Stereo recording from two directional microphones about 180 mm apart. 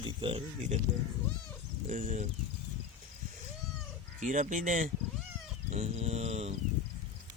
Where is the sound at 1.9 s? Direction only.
45° right (ahead or behind).